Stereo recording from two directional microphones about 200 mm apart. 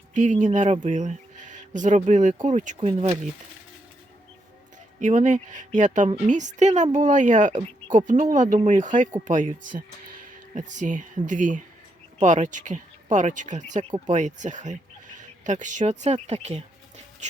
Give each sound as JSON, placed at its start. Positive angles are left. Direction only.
{"t": 0.1, "sound": "speech", "side_deg": -40}
{"t": 4.9, "sound": "speech", "side_deg": -40}